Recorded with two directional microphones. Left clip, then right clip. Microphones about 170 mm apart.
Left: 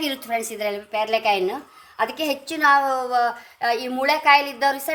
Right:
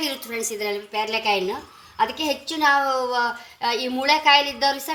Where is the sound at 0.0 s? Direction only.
75° left (ahead or behind).